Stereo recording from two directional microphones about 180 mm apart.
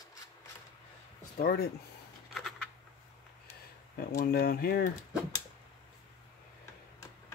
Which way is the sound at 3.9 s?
55° left (ahead or behind).